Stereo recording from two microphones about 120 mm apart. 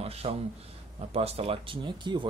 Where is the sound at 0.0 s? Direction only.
55° right (ahead or behind).